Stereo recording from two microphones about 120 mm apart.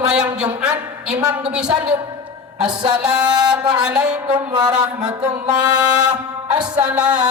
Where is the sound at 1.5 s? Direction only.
10° right (ahead or behind).